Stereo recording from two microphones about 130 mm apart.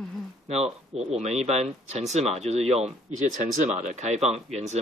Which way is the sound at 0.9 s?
55° right (ahead or behind).